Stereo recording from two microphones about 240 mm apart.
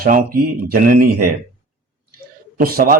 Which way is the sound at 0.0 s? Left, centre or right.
Right.